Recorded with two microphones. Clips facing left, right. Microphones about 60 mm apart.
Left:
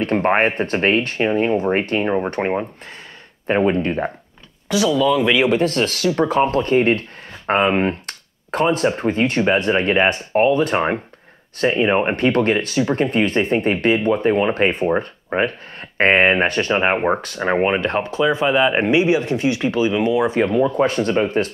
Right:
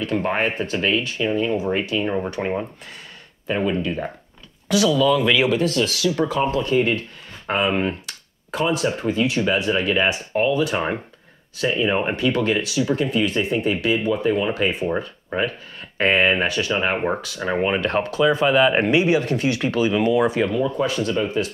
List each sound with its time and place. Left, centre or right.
0.0 s speech: left
4.6 s speech: left
20.2 s speech: left